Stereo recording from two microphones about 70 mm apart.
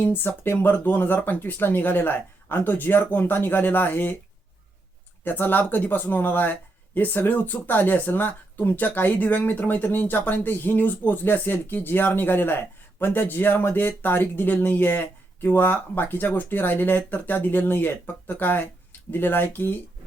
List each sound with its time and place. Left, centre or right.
0.0 s speech: left
5.2 s speech: left